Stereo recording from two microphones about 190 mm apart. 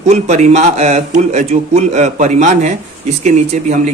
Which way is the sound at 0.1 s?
40° right (ahead or behind).